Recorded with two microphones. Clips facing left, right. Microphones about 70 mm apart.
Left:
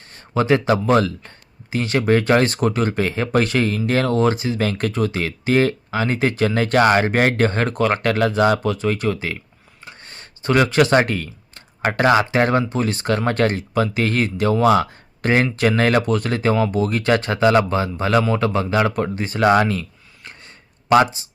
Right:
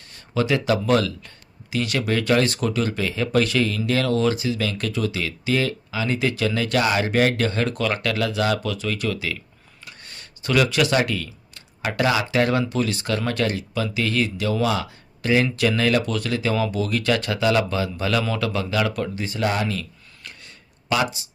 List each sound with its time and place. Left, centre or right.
0.0 s speech: left
19.4 s speech: left
20.2 s a sound: left